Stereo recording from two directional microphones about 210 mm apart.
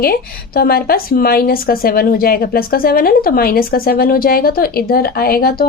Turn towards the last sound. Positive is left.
turn(degrees=45)  # may be behind; listen again after turning